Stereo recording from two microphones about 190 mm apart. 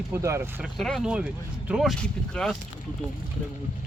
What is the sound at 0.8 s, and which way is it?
Speech, centre (ahead or behind).